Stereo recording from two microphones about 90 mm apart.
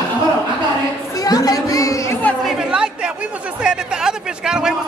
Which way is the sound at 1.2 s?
45° left (ahead or behind).